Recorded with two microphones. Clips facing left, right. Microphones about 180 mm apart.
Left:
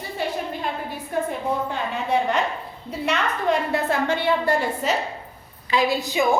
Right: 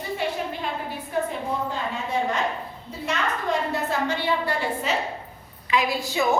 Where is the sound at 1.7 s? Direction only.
65° left (ahead or behind).